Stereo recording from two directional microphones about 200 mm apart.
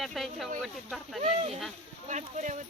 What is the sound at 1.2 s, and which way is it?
Speech, 35° right (ahead or behind).